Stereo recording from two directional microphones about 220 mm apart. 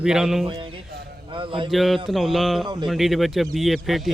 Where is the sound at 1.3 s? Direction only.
20° right (ahead or behind).